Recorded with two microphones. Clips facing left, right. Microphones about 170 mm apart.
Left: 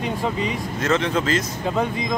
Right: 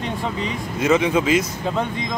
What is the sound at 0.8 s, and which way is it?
Speech, 10° right (ahead or behind).